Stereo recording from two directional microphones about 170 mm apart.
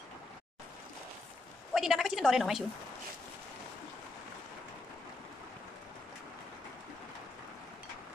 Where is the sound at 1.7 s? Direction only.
Centre (ahead or behind).